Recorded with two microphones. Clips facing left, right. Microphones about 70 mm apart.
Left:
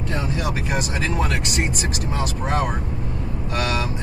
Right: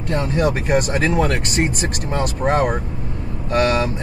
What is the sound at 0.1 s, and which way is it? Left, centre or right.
Speech, right.